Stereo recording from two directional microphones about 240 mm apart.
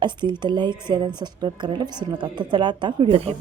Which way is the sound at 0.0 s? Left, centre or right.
Centre.